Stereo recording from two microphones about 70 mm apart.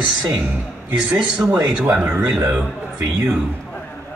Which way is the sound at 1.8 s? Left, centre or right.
Centre.